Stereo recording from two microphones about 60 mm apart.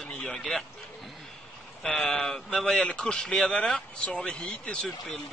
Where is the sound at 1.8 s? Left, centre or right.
Centre.